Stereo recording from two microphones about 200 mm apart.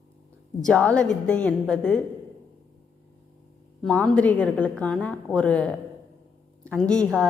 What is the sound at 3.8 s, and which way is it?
A woman's voice, 5° left (ahead or behind).